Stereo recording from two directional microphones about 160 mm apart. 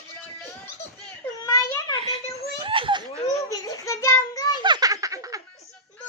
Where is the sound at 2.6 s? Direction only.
30° right (ahead or behind).